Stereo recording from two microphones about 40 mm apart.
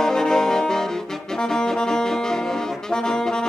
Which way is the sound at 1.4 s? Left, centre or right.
Centre.